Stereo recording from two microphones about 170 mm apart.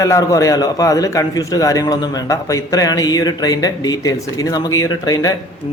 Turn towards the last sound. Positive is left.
turn(degrees=20)  # may be behind; listen again after turning